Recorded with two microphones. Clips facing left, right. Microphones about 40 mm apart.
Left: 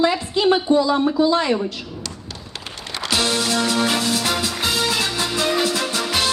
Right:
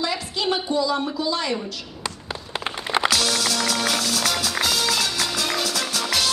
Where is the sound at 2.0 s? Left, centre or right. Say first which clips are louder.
Right 3 dB; right.